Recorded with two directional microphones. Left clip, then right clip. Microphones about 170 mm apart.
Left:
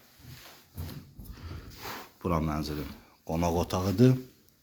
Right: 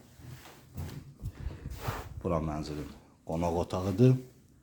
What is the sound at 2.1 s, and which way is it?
Speech, 10° left (ahead or behind).